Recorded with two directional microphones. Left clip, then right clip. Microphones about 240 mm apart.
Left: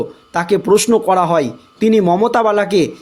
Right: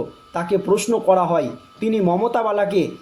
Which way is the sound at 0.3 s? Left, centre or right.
Left.